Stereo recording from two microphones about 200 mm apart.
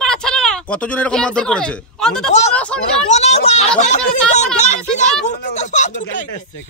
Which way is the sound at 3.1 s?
35° left (ahead or behind).